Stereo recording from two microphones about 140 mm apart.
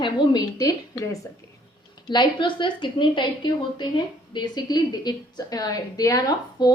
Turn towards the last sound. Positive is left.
turn(degrees=25)  # may be behind; listen again after turning